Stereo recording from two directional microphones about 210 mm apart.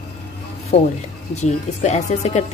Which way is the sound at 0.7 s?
30° left (ahead or behind).